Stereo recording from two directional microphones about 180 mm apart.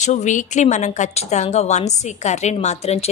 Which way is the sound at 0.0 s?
40° left (ahead or behind).